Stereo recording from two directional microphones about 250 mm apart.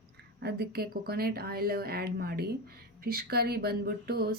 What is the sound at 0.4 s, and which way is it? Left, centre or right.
Speech, right.